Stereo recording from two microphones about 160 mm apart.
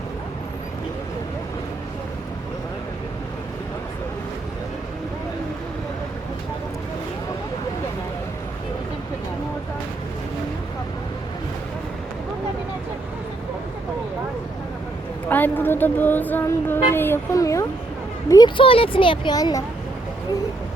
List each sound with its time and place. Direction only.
15.3 s speech: 10° left (ahead or behind)